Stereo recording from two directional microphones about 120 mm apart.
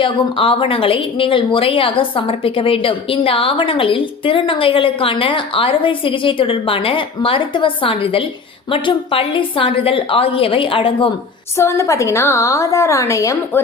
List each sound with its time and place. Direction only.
0.0 s a woman's voice: 45° left (ahead or behind)
11.5 s a woman's voice: 25° left (ahead or behind)